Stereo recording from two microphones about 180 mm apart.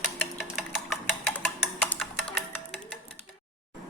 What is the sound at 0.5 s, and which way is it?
Music, 5° right (ahead or behind).